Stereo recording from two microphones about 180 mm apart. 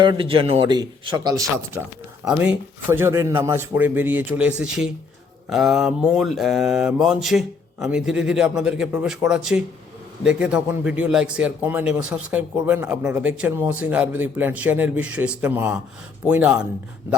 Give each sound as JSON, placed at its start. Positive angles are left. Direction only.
{"t": 0.0, "sound": "speech", "side_deg": -25}
{"t": 0.7, "sound": "speech", "side_deg": -20}
{"t": 2.2, "sound": "a man's voice", "side_deg": -5}
{"t": 5.5, "sound": "mantra", "side_deg": -5}
{"t": 10.2, "sound": "a man's voice", "side_deg": -5}